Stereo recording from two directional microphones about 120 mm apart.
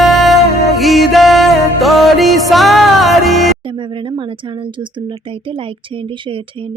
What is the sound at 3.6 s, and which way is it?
Speech, 45° right (ahead or behind).